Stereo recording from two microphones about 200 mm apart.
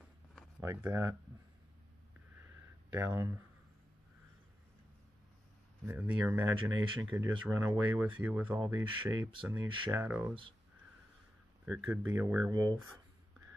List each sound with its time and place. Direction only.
0.6 s speech: 15° right (ahead or behind)
2.4 s a sound: 10° right (ahead or behind)
5.9 s speech: 10° right (ahead or behind)
11.6 s speech: 5° right (ahead or behind)